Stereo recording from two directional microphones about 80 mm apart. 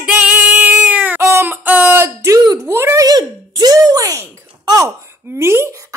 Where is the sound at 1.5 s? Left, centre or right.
Right.